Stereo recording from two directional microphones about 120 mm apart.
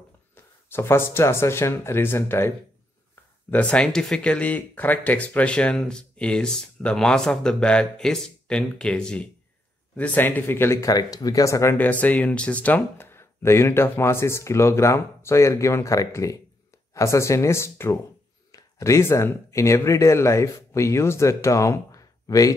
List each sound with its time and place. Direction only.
0.3 s speech: 20° left (ahead or behind)